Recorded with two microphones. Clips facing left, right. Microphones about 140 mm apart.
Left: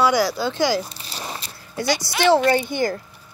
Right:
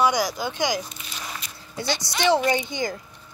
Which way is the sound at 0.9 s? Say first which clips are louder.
Left 4 dB; 35° left (ahead or behind).